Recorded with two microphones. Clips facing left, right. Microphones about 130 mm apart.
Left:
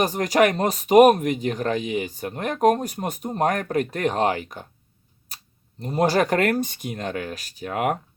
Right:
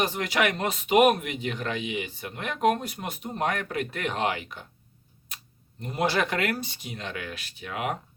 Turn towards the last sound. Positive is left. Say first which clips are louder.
# left 7 dB
turn(degrees=50)  # may be behind; listen again after turning